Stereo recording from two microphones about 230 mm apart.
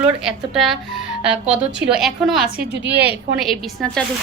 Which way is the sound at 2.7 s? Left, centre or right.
Right.